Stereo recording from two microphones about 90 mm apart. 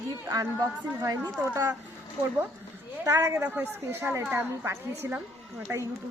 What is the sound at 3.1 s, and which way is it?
Speech, 35° right (ahead or behind).